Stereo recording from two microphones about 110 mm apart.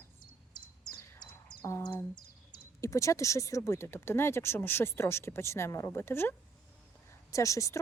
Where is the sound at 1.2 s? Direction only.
45° left (ahead or behind).